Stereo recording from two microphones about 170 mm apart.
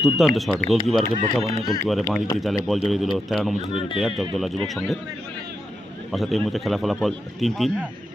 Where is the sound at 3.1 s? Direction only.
Centre (ahead or behind).